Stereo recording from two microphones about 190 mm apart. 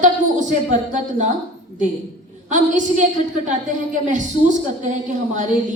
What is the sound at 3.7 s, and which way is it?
Speech, 45° right (ahead or behind).